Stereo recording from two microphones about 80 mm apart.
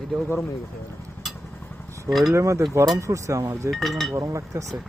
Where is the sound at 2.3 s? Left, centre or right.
Right.